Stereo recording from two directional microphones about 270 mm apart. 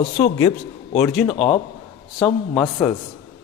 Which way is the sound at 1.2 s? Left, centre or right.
Centre.